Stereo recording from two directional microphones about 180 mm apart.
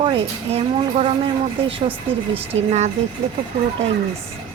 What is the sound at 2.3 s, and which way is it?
Speech, 35° right (ahead or behind).